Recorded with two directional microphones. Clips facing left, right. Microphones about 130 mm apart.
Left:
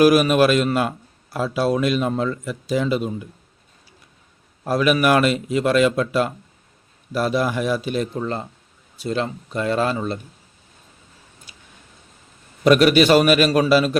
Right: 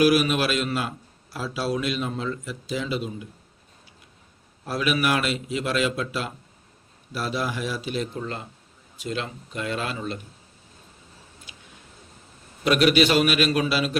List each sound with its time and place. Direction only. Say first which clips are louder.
0.0 s a man's voice: left 6 dB; 50° left (ahead or behind)
4.6 s a man's voice: left 7 dB; 50° left (ahead or behind)
9.0 s speech: left 7 dB; 35° left (ahead or behind)
11.5 s a sound: right 1 dB; 40° left (ahead or behind)
12.6 s a man's voice: left 5 dB; 45° left (ahead or behind)